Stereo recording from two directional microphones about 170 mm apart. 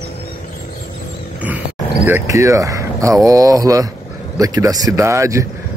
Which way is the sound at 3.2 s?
20° right (ahead or behind).